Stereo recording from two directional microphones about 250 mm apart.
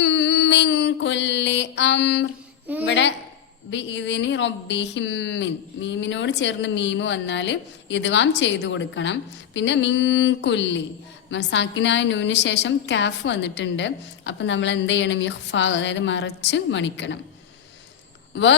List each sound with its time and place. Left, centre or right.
0.0 s mantra: left
2.8 s a woman's voice: left